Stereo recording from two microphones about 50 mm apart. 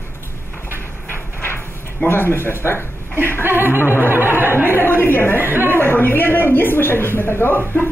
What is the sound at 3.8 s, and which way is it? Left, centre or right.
Speech, left.